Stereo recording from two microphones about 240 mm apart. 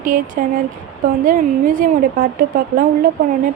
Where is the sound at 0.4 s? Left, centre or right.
Right.